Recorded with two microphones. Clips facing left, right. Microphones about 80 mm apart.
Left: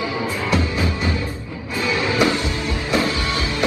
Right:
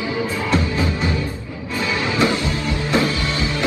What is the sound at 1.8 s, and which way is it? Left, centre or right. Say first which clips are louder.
Music: left 1 dB; right.